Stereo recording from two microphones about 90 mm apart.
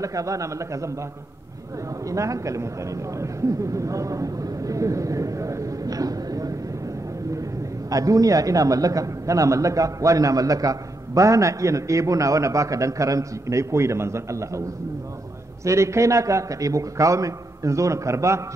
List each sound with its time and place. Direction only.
0.0 s a man's voice: 40° right (ahead or behind)
2.0 s a man's voice: 35° right (ahead or behind)
7.9 s a man's voice: 40° right (ahead or behind)
15.6 s a man's voice: 35° right (ahead or behind)